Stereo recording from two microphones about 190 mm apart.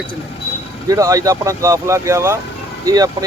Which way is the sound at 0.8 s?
15° right (ahead or behind).